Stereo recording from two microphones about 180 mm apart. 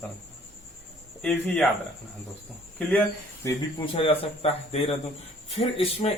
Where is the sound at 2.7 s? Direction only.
5° left (ahead or behind).